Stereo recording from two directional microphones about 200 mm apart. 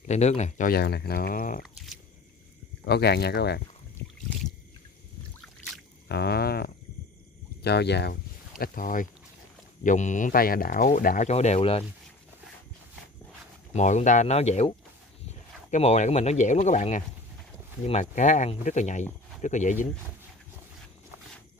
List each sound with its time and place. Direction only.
0.0 s speech: 35° left (ahead or behind)
2.8 s speech: 55° left (ahead or behind)
6.0 s speech: 55° left (ahead or behind); by 11.8 s 30° left (ahead or behind)
13.7 s speech: 35° left (ahead or behind)